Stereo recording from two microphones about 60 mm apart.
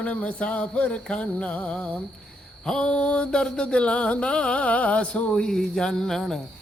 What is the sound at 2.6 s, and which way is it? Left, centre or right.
Mantra, centre.